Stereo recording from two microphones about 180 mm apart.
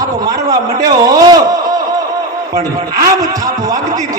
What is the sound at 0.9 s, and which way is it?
Speech, 20° right (ahead or behind).